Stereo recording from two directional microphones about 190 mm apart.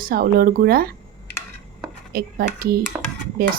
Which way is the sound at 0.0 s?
50° right (ahead or behind).